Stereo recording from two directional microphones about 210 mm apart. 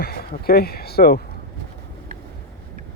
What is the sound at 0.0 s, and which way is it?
Speech, 45° left (ahead or behind).